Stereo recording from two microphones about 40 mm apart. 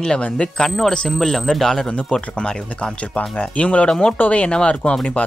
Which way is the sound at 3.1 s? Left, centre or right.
Left.